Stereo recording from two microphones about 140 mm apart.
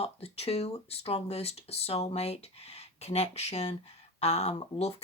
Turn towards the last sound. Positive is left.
turn(degrees=45)  # may be behind; listen again after turning